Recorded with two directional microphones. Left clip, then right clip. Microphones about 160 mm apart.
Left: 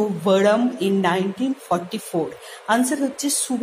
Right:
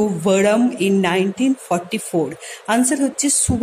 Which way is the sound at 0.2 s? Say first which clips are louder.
Right 1 dB; 40° right (ahead or behind).